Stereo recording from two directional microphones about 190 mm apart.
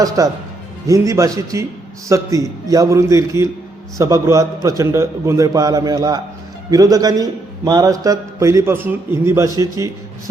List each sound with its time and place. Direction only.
0.2 s a man's voice: 15° right (ahead or behind)